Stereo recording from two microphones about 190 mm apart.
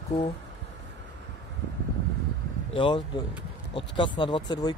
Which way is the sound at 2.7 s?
25° left (ahead or behind).